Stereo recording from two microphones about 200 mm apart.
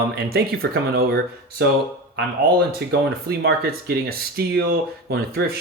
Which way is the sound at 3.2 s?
50° right (ahead or behind).